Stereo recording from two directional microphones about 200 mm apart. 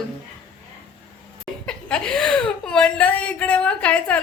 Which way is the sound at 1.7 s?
5° left (ahead or behind).